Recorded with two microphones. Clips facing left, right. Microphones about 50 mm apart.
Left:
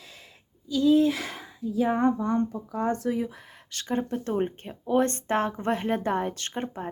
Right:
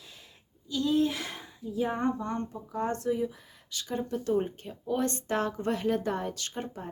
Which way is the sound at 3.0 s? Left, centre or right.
Left.